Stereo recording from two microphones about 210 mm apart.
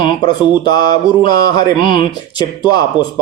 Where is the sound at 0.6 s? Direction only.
20° left (ahead or behind).